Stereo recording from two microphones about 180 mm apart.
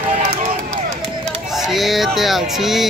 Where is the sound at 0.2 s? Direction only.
40° right (ahead or behind).